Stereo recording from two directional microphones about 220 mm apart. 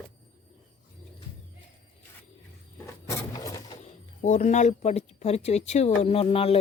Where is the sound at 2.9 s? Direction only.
15° left (ahead or behind).